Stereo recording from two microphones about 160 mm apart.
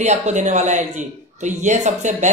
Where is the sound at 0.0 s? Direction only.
45° right (ahead or behind).